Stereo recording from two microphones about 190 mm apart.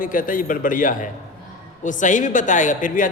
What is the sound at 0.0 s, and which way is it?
Speech, 45° left (ahead or behind).